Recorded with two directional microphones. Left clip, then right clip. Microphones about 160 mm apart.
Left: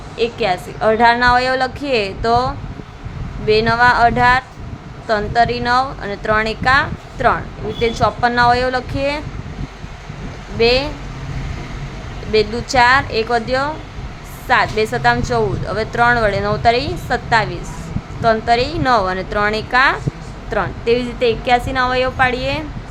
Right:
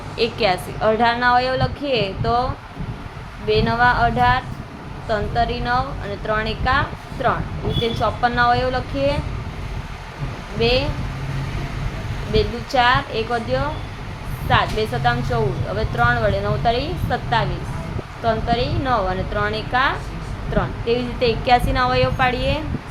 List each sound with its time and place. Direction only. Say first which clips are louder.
0.2 s speech: left 2 dB; 10° left (ahead or behind)
10.6 s speech: left 5 dB; 25° left (ahead or behind)
12.3 s a woman's voice: left 5 dB; 25° left (ahead or behind)